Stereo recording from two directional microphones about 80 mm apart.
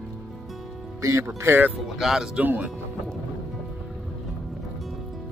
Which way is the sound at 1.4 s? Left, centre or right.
Right.